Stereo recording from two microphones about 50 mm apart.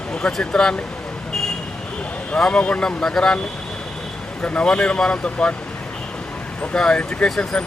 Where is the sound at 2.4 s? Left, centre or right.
Centre.